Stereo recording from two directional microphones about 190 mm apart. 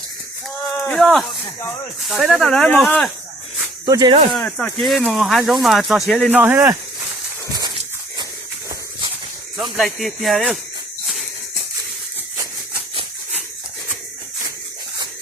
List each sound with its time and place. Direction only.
0.7 s a sound: centre (ahead or behind)
2.0 s speech: centre (ahead or behind)
3.8 s speech: 20° right (ahead or behind)
4.3 s speech: centre (ahead or behind)
6.3 s speech: 10° right (ahead or behind)
9.7 s speech: centre (ahead or behind)